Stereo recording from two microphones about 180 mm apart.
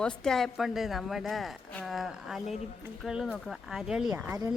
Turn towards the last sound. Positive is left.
turn(degrees=-5)  # may be behind; listen again after turning